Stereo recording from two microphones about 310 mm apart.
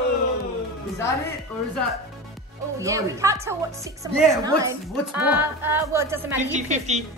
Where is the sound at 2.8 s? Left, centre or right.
Centre.